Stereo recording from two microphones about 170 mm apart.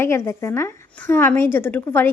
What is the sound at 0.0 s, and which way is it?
A woman's voice, 15° left (ahead or behind).